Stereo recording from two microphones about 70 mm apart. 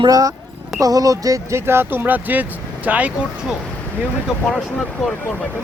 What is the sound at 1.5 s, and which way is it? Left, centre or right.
Speech, right.